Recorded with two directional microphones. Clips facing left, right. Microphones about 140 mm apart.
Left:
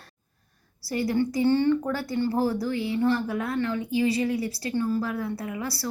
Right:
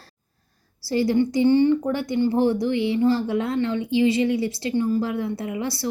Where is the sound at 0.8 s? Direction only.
25° right (ahead or behind).